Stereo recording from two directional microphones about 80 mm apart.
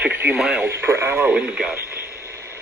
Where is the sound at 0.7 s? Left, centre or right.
Right.